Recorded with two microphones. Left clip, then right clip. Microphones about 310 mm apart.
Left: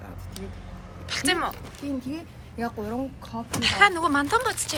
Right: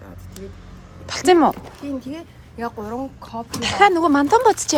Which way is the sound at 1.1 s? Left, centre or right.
Right.